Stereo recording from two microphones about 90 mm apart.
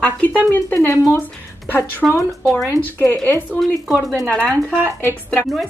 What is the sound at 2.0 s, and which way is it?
Speech, centre (ahead or behind).